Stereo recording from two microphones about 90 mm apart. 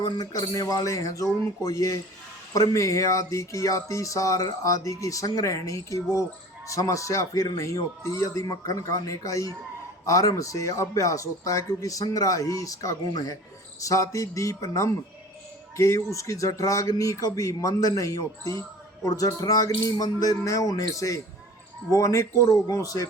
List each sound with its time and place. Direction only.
0.0 s speech: 45° left (ahead or behind)